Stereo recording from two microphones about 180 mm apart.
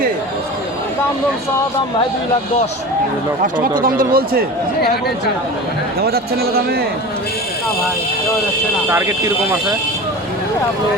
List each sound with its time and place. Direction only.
3.4 s speech: 55° right (ahead or behind)
6.0 s a man's voice: 60° right (ahead or behind)
8.9 s speech: 15° right (ahead or behind)